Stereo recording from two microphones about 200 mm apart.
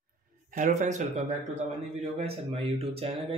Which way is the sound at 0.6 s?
40° right (ahead or behind).